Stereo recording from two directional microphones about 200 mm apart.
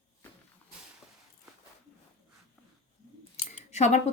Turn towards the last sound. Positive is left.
turn(degrees=35)  # may be behind; listen again after turning